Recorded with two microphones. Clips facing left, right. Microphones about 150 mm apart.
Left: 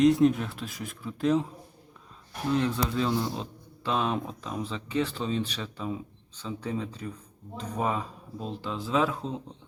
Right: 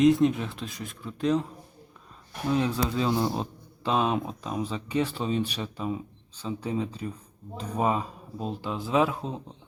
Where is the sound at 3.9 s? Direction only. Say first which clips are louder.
Right 3 dB; 20° right (ahead or behind).